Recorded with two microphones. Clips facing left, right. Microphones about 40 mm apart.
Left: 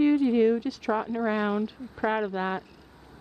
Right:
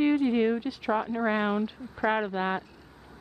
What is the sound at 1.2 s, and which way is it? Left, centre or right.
Speech, right.